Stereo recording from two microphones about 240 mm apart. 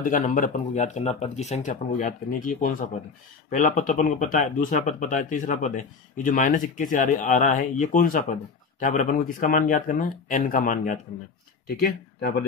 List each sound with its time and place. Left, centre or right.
0.0 s speech: left